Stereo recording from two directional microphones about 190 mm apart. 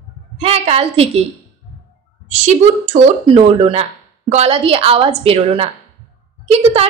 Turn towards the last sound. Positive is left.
turn(degrees=-30)  # may be behind; listen again after turning